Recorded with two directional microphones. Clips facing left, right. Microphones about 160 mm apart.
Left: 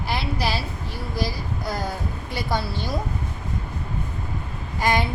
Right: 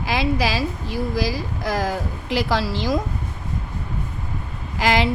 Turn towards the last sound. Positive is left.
turn(degrees=-90)